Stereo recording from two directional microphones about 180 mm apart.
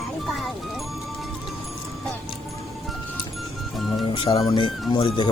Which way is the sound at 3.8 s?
Centre (ahead or behind).